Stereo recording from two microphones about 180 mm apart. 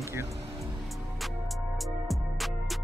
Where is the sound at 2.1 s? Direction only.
Centre (ahead or behind).